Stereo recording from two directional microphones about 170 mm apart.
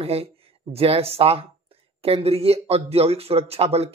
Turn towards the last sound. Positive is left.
turn(degrees=-35)  # may be behind; listen again after turning